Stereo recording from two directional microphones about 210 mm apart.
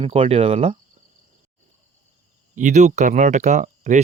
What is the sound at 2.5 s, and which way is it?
Speech, 35° right (ahead or behind).